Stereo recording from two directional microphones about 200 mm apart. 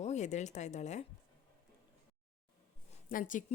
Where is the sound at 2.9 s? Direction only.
40° left (ahead or behind).